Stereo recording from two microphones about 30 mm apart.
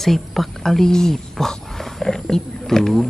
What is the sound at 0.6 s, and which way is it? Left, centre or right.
Speech, centre.